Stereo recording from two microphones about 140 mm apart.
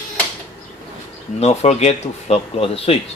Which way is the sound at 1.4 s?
50° left (ahead or behind).